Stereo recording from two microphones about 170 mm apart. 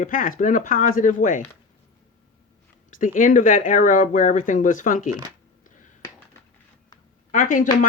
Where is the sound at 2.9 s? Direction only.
50° left (ahead or behind).